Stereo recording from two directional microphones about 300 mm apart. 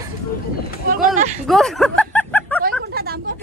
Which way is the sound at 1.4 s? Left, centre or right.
Centre.